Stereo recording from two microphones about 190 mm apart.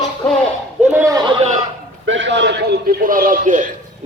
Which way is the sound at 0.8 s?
10° right (ahead or behind).